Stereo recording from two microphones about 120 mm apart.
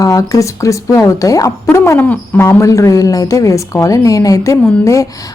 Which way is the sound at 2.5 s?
25° left (ahead or behind).